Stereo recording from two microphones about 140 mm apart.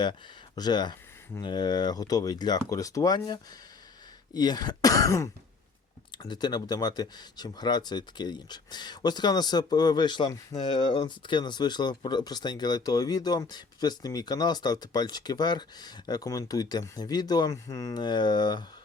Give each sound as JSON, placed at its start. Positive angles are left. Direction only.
{"t": 0.0, "sound": "speech", "side_deg": 30}